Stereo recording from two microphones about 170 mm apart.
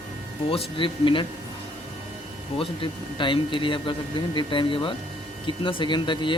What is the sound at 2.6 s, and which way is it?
Speech, 30° left (ahead or behind).